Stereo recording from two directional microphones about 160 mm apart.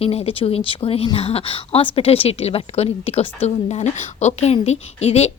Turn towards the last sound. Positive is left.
turn(degrees=40)  # may be behind; listen again after turning